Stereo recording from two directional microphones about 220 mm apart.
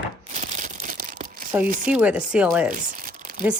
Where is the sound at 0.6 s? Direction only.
35° right (ahead or behind).